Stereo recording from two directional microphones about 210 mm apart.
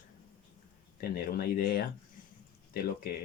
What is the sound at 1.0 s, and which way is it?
Speech, 45° left (ahead or behind).